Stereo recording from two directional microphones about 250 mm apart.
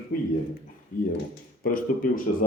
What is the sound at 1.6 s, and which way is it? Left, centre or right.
Speech, left.